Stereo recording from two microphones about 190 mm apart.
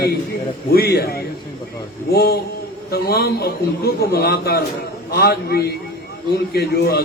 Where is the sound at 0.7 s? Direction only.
55° left (ahead or behind).